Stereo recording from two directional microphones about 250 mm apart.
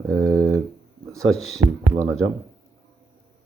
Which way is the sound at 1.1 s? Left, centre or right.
Centre.